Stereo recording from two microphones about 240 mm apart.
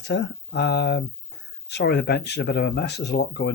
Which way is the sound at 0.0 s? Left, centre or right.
Left.